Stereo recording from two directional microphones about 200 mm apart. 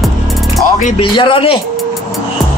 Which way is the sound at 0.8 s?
40° left (ahead or behind).